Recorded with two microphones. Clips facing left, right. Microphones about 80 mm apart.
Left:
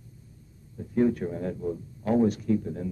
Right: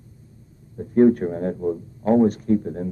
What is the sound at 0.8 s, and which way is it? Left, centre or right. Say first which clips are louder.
Speech: right 8 dB; right.